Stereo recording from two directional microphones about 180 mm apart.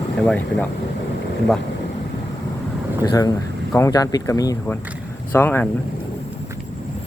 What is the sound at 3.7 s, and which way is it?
Speech, 20° left (ahead or behind).